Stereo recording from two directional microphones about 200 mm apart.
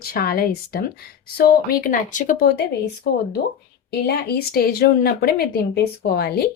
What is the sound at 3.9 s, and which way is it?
Speech, 50° left (ahead or behind).